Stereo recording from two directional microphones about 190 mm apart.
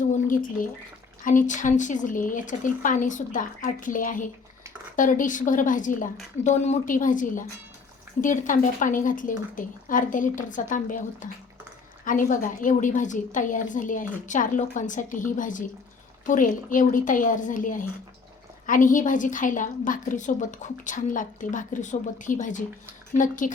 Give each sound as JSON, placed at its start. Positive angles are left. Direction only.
{"t": 0.0, "sound": "drip", "side_deg": 45}
{"t": 1.2, "sound": "a woman's voice", "side_deg": 45}